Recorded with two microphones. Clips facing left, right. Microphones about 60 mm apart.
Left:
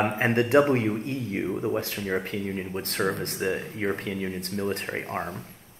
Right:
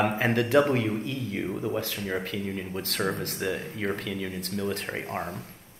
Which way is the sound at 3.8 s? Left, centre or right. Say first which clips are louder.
Left 2 dB; left.